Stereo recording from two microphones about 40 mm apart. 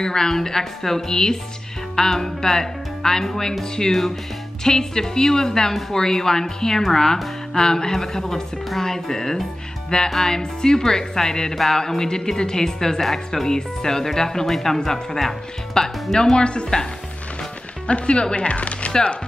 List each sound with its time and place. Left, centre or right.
0.0 s speech: centre
17.8 s speech: left